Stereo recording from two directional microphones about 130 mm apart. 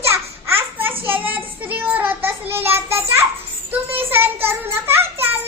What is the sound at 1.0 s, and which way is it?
Child singing, 15° right (ahead or behind).